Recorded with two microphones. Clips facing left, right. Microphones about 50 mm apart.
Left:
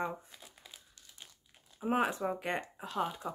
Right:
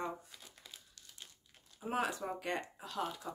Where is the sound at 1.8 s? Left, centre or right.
Left.